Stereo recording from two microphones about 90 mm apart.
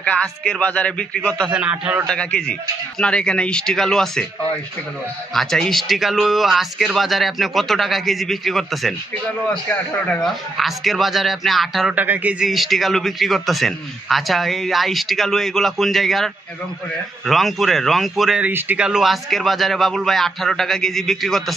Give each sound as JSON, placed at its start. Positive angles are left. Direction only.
{"t": 0.0, "sound": "a man's voice", "side_deg": 10}
{"t": 1.5, "sound": "a man's voice", "side_deg": -15}
{"t": 2.0, "sound": "a man's voice", "side_deg": 10}
{"t": 5.3, "sound": "a man's voice", "side_deg": 5}
{"t": 10.2, "sound": "a man's voice", "side_deg": 0}
{"t": 11.9, "sound": "a man's voice", "side_deg": -20}
{"t": 12.4, "sound": "a man's voice", "side_deg": 0}
{"t": 17.3, "sound": "a man's voice", "side_deg": 0}
{"t": 18.4, "sound": "a man's voice", "side_deg": -20}
{"t": 18.9, "sound": "a man's voice", "side_deg": -5}